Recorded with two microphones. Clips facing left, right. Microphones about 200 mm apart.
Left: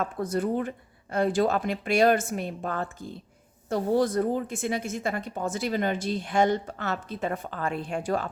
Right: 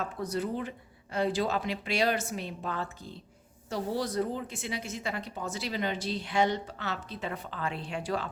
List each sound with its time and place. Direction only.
0.0 s a woman's voice: 50° left (ahead or behind)